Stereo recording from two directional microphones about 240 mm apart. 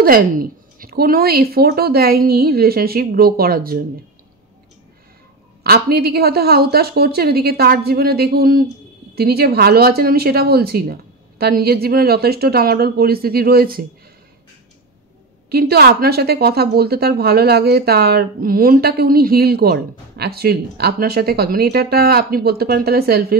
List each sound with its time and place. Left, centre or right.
0.0 s a woman's voice: right
5.6 s a woman's voice: right
15.5 s a woman's voice: right